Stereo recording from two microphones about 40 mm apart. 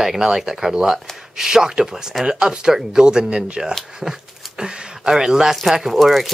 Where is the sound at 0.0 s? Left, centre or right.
Centre.